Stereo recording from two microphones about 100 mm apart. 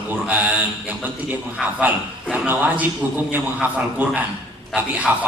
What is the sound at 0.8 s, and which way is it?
A man's voice, 15° right (ahead or behind).